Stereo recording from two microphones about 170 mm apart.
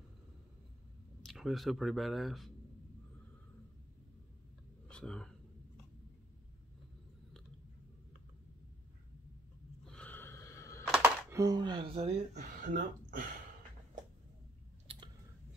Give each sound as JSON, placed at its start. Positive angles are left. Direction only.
{"t": 1.2, "sound": "speech", "side_deg": 0}
{"t": 4.8, "sound": "a sound", "side_deg": 5}
{"t": 9.8, "sound": "a sound", "side_deg": 10}
{"t": 10.9, "sound": "music", "side_deg": -5}
{"t": 11.3, "sound": "speech", "side_deg": -25}
{"t": 14.9, "sound": "clicking", "side_deg": -35}